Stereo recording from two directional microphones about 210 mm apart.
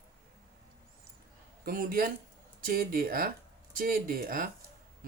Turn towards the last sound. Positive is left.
turn(degrees=-45)  # may be behind; listen again after turning